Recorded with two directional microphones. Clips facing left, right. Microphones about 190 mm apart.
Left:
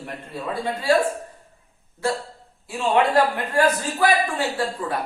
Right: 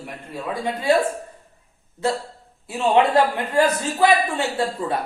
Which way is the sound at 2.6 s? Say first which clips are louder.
Right 2 dB; 20° right (ahead or behind).